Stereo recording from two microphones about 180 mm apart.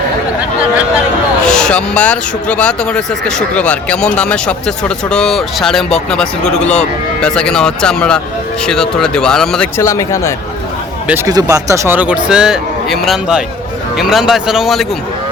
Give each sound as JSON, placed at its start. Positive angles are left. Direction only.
{"t": 1.5, "sound": "speech", "side_deg": 5}
{"t": 9.7, "sound": "speech", "side_deg": 15}
{"t": 11.1, "sound": "speech", "side_deg": -20}